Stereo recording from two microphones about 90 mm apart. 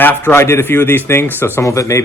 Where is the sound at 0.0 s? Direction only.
20° left (ahead or behind).